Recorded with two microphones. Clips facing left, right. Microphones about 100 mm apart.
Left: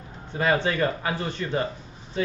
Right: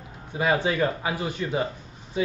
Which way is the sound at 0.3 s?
10° right (ahead or behind).